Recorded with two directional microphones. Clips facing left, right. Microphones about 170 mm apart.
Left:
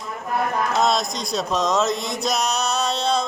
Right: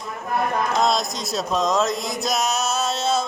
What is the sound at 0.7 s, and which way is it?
Speech, centre (ahead or behind).